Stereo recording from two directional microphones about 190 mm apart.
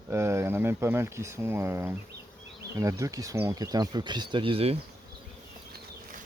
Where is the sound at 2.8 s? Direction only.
15° right (ahead or behind).